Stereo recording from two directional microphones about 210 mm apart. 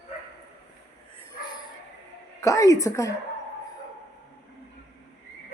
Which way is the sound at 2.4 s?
15° left (ahead or behind).